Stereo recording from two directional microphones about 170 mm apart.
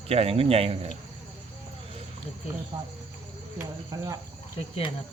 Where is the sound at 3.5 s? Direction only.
20° right (ahead or behind).